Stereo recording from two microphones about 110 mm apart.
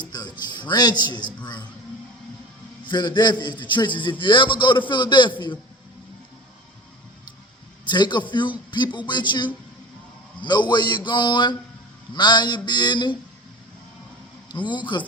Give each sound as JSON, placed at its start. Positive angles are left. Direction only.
{"t": 0.0, "sound": "music", "side_deg": 40}
{"t": 2.8, "sound": "speech", "side_deg": 45}
{"t": 7.9, "sound": "speech", "side_deg": 45}
{"t": 14.5, "sound": "speech", "side_deg": 45}